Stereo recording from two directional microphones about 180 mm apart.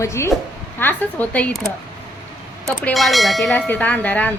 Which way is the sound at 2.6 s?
Centre (ahead or behind).